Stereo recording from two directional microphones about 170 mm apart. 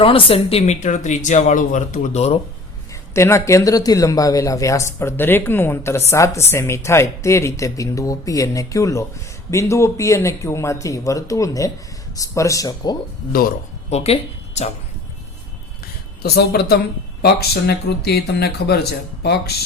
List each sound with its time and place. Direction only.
0.0 s speech: 35° left (ahead or behind)
3.2 s speech: 15° left (ahead or behind)
13.9 s speech: 35° left (ahead or behind)
16.2 s speech: 70° left (ahead or behind)